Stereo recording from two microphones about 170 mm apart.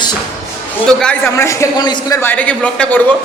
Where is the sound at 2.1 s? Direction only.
10° left (ahead or behind).